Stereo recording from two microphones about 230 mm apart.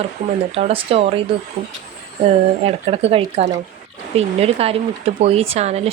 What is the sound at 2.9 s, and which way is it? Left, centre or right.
Speech, right.